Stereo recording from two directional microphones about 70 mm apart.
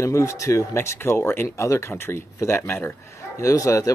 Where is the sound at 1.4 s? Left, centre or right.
Left.